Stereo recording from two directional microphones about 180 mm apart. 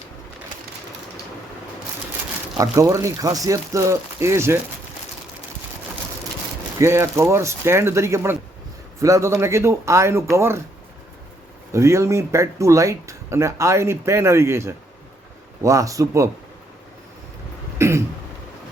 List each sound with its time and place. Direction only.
2.6 s speech: 15° right (ahead or behind)
6.7 s speech: 15° right (ahead or behind)
11.7 s speech: 15° right (ahead or behind)
17.7 s cough: 15° right (ahead or behind)